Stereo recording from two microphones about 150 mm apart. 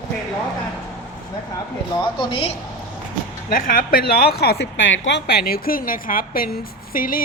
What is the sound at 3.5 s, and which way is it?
A woman's voice, 65° left (ahead or behind).